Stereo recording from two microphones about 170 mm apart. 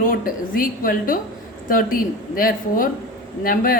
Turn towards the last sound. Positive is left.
turn(degrees=55)  # may be behind; listen again after turning